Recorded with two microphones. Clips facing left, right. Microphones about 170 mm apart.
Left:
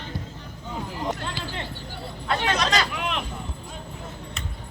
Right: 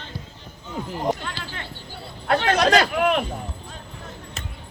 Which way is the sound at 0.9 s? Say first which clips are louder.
Right 6 dB; 50° right (ahead or behind).